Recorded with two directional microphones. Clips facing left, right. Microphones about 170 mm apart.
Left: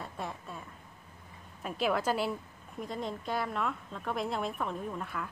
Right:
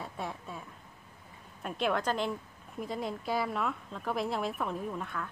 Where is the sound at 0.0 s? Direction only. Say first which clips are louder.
Right 1 dB; centre (ahead or behind).